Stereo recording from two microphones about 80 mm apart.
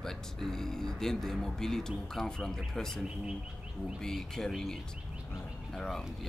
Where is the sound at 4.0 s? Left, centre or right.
Centre.